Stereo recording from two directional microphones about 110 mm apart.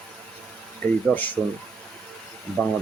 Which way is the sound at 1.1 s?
15° left (ahead or behind).